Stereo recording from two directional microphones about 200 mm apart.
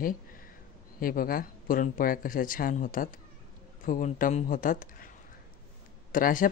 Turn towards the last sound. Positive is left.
turn(degrees=45)  # may be behind; listen again after turning